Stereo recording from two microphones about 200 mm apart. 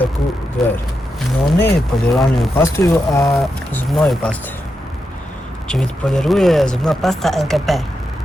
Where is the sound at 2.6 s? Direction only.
15° left (ahead or behind).